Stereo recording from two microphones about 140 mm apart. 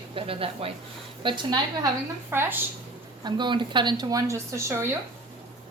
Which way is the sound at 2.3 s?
15° right (ahead or behind).